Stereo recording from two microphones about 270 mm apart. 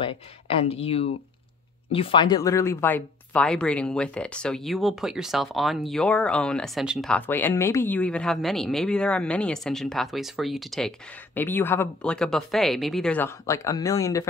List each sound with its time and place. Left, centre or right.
0.0 s speech: left